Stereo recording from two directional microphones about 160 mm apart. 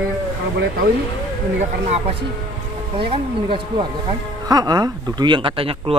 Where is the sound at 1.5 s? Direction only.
45° right (ahead or behind).